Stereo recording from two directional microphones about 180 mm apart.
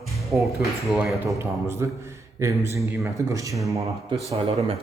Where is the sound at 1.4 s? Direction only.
15° right (ahead or behind).